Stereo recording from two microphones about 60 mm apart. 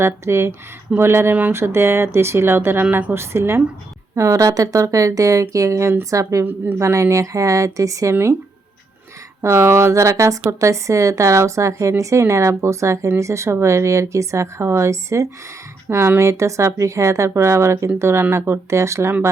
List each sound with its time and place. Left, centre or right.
0.0 s speech: right
4.1 s a woman's voice: right
6.4 s a woman's voice: right
6.7 s a woman's voice: right
9.4 s a woman's voice: right